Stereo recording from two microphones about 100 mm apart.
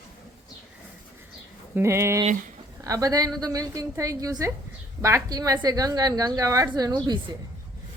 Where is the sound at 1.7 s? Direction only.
25° right (ahead or behind).